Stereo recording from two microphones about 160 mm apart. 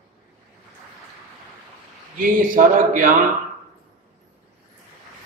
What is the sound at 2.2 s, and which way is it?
Speech, 60° right (ahead or behind).